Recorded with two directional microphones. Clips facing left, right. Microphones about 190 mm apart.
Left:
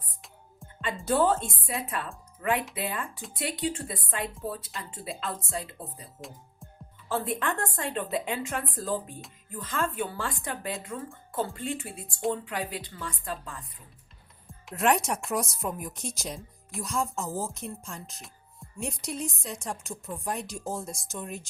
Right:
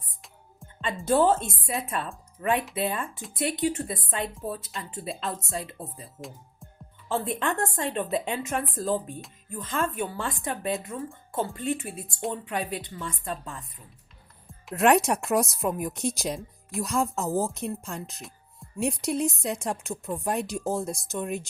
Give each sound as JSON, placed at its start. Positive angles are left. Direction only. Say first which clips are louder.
{"t": 1.0, "sound": "a woman's voice", "louder": "right 3 dB", "side_deg": -25}
{"t": 7.1, "sound": "a woman's voice", "louder": "right 2 dB", "side_deg": -25}
{"t": 14.4, "sound": "music", "louder": "right 5 dB", "side_deg": 0}
{"t": 14.8, "sound": "speech", "louder": "right 5 dB", "side_deg": -65}